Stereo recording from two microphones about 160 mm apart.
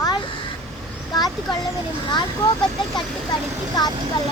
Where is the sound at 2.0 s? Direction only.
30° left (ahead or behind).